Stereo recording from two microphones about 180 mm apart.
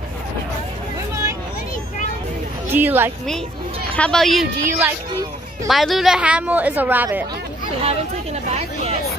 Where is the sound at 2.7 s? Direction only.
10° right (ahead or behind).